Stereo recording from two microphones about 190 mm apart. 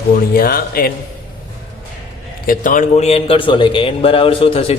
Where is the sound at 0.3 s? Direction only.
50° left (ahead or behind).